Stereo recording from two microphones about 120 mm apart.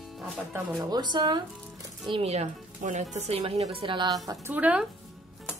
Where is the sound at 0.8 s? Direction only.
35° right (ahead or behind).